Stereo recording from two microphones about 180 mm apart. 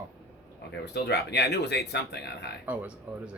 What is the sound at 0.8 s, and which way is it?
Speech, 70° left (ahead or behind).